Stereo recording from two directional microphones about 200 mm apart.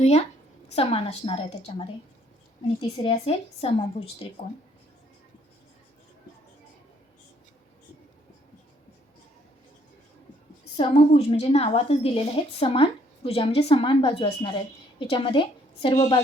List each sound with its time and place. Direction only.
0.0 s a woman's voice: 35° left (ahead or behind)
3.0 s a woman's voice: 25° left (ahead or behind)
10.8 s a woman's voice: 30° left (ahead or behind)